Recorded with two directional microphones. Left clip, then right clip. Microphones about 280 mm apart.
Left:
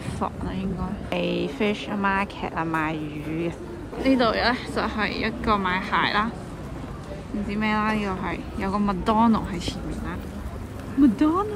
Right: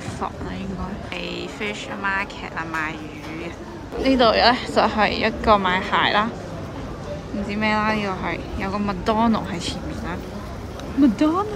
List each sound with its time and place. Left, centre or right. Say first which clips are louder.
1.1 s speech: left 5 dB; centre
4.0 s speech: right 5 dB; centre
7.4 s speech: right 4 dB; centre
11.1 s speech: right 2 dB; centre